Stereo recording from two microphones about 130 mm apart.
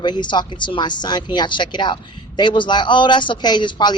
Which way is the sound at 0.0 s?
35° left (ahead or behind).